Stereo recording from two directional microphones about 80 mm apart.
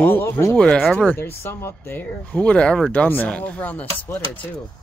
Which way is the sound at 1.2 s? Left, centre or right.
Left.